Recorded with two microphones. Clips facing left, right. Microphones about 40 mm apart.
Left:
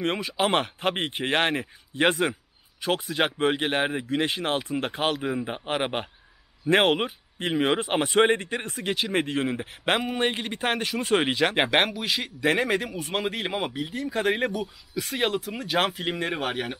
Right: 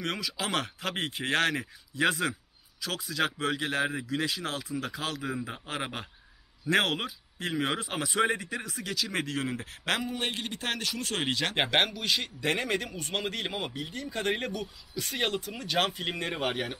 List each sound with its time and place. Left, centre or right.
0.0 s a man's voice: left; by 16.7 s centre